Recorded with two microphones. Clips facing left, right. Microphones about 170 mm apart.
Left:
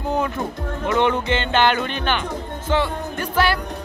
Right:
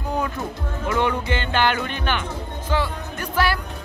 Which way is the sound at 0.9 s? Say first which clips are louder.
Left 3 dB; 25° left (ahead or behind).